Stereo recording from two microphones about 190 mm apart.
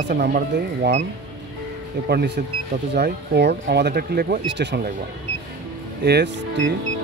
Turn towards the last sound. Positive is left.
turn(degrees=-60)  # may be behind; listen again after turning